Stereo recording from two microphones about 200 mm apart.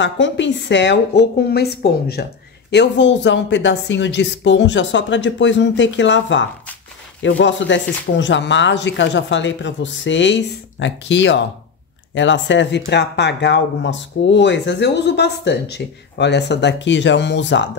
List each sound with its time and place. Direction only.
0.0 s speech: 65° left (ahead or behind)